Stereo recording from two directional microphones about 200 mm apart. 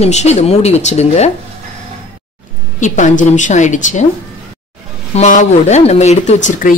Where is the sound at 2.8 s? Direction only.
40° left (ahead or behind).